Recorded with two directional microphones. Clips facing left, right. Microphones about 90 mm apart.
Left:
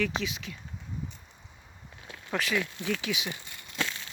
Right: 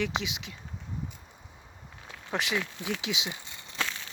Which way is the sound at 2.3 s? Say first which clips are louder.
Left 1 dB; 20° right (ahead or behind).